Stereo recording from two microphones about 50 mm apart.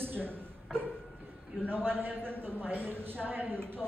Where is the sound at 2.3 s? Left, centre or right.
Right.